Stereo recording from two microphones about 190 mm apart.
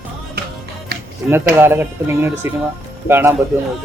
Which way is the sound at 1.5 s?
10° right (ahead or behind).